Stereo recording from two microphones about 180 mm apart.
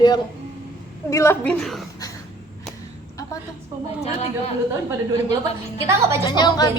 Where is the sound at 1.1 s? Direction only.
15° left (ahead or behind).